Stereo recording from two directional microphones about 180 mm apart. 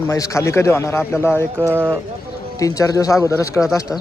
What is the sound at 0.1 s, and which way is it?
A man's voice, 15° left (ahead or behind).